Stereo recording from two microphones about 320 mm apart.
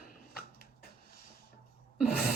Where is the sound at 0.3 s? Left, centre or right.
Left.